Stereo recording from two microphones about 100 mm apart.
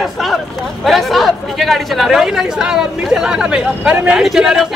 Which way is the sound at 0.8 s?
Centre (ahead or behind).